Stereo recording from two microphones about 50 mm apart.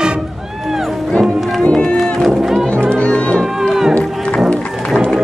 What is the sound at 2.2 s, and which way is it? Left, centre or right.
Music, centre.